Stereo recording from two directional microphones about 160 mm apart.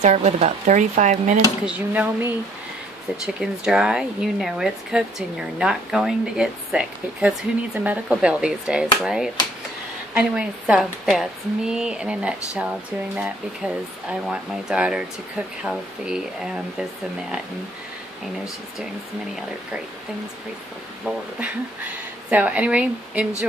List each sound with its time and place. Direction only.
0.0 s speech: 45° right (ahead or behind)
1.7 s a woman's voice: 10° right (ahead or behind)
3.3 s speech: 5° right (ahead or behind)
22.3 s a woman's voice: 10° right (ahead or behind)